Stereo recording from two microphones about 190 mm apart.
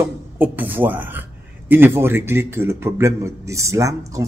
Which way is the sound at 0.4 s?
10° right (ahead or behind).